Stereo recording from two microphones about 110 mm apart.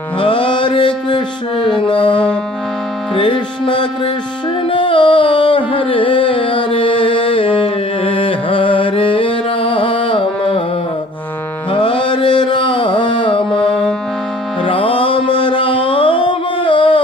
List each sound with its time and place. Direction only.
0.2 s mantra: 50° left (ahead or behind)
3.2 s music: 50° left (ahead or behind)
11.7 s mantra: 50° left (ahead or behind)
14.6 s music: 50° left (ahead or behind)